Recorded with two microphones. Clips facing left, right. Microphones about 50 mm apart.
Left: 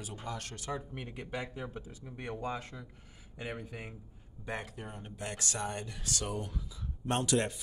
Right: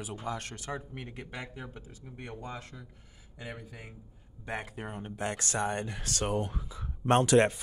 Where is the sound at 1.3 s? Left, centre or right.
Right.